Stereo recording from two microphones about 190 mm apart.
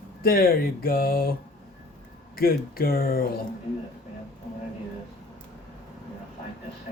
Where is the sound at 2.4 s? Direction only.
50° left (ahead or behind).